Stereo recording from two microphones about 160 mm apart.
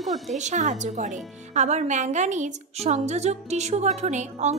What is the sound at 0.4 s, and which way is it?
Speech, 50° right (ahead or behind).